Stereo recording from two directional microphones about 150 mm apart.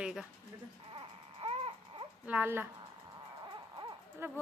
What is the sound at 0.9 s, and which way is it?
Baby cry, 35° right (ahead or behind).